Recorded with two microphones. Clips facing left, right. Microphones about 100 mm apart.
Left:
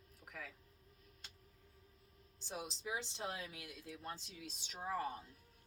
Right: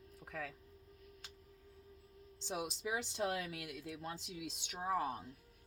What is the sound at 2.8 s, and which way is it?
Speech, 90° right.